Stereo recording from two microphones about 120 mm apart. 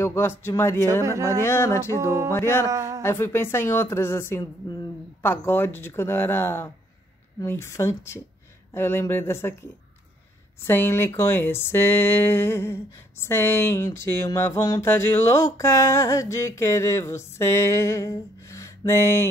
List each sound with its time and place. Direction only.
0.0 s speech: 20° left (ahead or behind)
1.9 s music: 25° right (ahead or behind)
2.3 s speech: 20° left (ahead or behind)
2.7 s music: 25° right (ahead or behind)
3.0 s speech: 20° left (ahead or behind)